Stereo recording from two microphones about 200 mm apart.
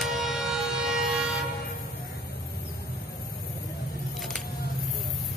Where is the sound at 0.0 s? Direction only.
Centre (ahead or behind).